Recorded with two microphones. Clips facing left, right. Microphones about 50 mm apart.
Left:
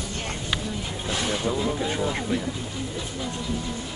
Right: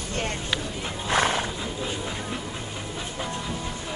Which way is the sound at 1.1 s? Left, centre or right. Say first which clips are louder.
Right 5 dB; right.